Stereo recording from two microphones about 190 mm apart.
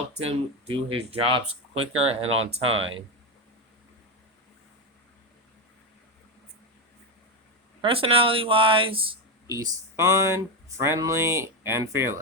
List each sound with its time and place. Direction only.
0.3 s speech: 30° right (ahead or behind)
7.8 s speech: 30° right (ahead or behind)
9.5 s speech: 15° right (ahead or behind)